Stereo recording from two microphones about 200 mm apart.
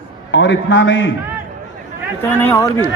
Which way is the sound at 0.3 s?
65° left (ahead or behind).